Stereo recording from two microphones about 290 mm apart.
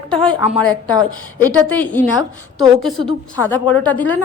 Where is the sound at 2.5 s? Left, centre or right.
Centre.